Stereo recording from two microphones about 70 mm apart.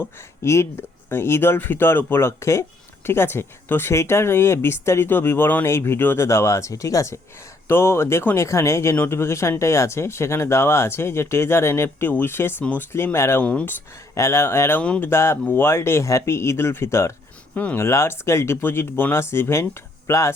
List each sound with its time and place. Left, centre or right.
0.0 s speech: left
6.2 s speech: left
7.7 s speech: left
8.4 s speech: left
13.4 s speech: centre
14.2 s speech: left
14.8 s speech: centre
15.1 s speech: left
17.5 s speech: left
17.7 s speech: left